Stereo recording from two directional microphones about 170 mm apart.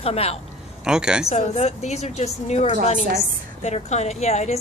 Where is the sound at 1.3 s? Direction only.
40° left (ahead or behind).